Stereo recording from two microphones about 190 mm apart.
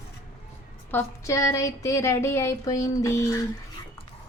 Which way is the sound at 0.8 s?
15° left (ahead or behind).